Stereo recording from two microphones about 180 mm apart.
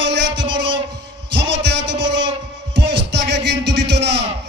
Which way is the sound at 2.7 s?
70° right (ahead or behind).